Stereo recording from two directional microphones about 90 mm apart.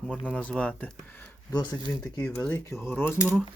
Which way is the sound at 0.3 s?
10° left (ahead or behind).